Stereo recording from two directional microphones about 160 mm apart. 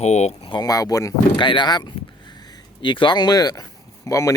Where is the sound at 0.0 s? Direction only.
45° left (ahead or behind).